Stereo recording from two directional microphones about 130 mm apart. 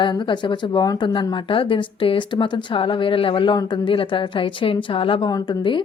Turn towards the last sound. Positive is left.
turn(degrees=35)  # may be behind; listen again after turning